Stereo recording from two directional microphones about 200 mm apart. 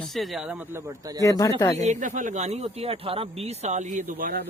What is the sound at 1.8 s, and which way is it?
Speech, 40° right (ahead or behind).